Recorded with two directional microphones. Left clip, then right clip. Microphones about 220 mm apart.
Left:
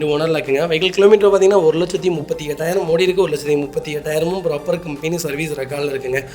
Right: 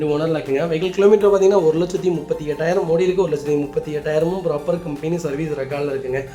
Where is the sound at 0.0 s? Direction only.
45° left (ahead or behind).